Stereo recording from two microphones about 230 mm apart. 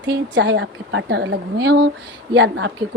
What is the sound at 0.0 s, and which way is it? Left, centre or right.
A woman's voice, right.